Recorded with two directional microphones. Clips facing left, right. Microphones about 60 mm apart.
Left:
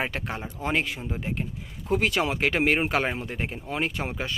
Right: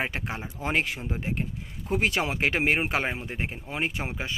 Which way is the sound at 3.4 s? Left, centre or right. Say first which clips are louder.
Left 2 dB; centre.